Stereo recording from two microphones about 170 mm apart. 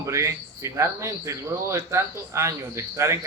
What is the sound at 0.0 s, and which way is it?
Speech, 15° right (ahead or behind).